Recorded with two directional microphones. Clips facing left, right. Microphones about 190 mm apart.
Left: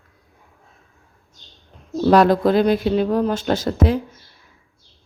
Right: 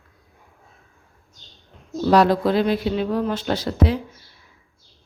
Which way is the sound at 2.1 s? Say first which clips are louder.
Left 3 dB; 50° left (ahead or behind).